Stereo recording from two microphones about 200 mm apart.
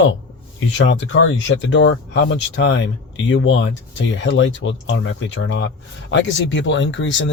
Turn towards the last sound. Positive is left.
turn(degrees=65)  # may be behind; listen again after turning